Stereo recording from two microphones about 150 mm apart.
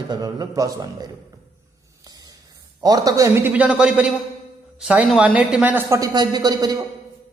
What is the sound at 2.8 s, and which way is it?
A man's voice, 25° right (ahead or behind).